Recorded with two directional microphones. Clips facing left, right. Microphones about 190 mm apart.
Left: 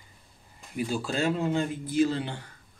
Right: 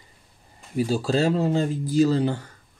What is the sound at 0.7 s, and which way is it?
Speech, 35° right (ahead or behind).